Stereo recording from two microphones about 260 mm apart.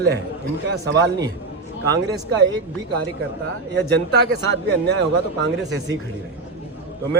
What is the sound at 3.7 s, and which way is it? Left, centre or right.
A man's voice, right.